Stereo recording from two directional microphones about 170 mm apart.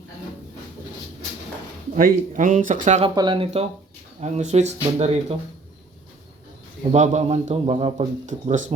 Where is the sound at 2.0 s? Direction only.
50° right (ahead or behind).